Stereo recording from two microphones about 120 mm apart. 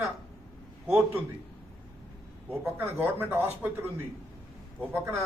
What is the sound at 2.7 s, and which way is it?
A man's voice, 20° right (ahead or behind).